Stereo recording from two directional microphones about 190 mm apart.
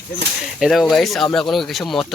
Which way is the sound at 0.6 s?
Centre (ahead or behind).